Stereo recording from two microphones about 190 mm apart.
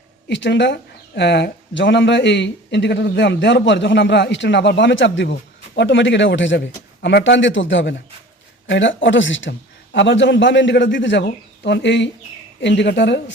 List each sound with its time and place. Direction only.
0.3 s speech: 70° left (ahead or behind)
7.0 s speech: 65° left (ahead or behind)